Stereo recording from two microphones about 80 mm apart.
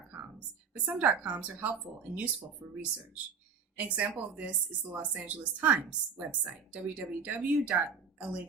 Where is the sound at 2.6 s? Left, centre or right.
Right.